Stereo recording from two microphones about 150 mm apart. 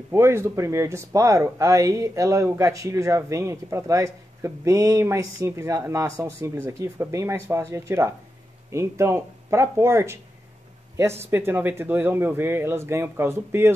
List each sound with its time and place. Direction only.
0.1 s speech: 15° right (ahead or behind)
11.2 s speech: 15° right (ahead or behind)